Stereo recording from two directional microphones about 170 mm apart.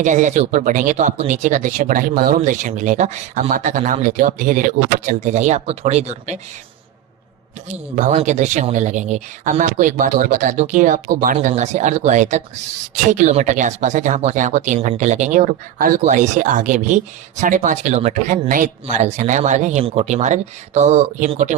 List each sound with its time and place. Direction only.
0.0 s speech: 45° right (ahead or behind)
7.9 s speech: 45° right (ahead or behind)
11.3 s speech: 40° right (ahead or behind)